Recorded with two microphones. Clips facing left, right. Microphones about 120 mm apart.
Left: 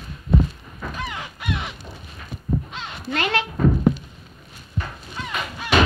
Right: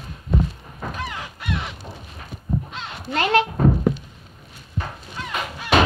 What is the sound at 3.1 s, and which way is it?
Speech, 35° right (ahead or behind).